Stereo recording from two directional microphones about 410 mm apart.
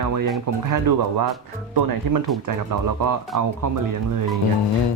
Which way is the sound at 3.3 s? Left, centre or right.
Right.